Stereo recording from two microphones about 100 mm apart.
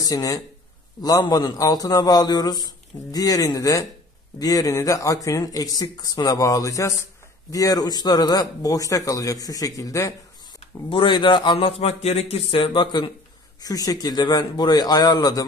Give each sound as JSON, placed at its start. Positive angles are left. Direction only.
{"t": 0.0, "sound": "a man's voice", "side_deg": 35}
{"t": 10.6, "sound": "a man's voice", "side_deg": 60}
{"t": 12.7, "sound": "speech", "side_deg": 50}
{"t": 13.6, "sound": "a man's voice", "side_deg": 35}